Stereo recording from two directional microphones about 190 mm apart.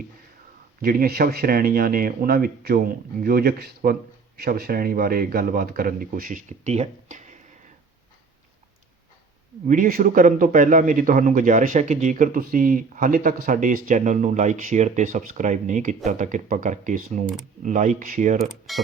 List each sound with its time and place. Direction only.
0.8 s a man's voice: 50° right (ahead or behind)
9.6 s a man's voice: 45° right (ahead or behind)
18.7 s speech: centre (ahead or behind)